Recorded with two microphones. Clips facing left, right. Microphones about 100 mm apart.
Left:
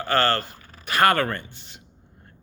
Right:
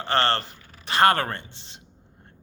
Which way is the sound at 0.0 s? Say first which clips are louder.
Left 1 dB; 30° right (ahead or behind).